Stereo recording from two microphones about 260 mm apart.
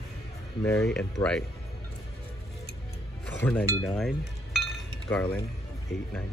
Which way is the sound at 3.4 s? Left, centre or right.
Centre.